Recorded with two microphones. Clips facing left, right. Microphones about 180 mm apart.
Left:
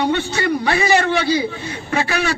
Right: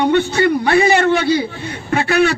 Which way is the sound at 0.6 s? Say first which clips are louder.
Right 3 dB; 50° right (ahead or behind).